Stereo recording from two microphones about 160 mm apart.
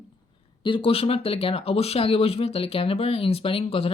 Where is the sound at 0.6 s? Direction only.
35° left (ahead or behind).